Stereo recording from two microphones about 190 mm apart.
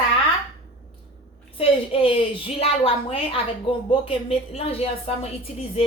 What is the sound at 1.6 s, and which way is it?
A woman's voice, 30° left (ahead or behind).